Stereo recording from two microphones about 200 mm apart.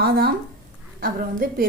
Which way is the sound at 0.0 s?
50° right (ahead or behind).